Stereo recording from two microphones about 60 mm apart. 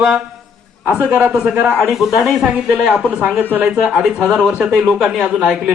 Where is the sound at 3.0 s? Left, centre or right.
Centre.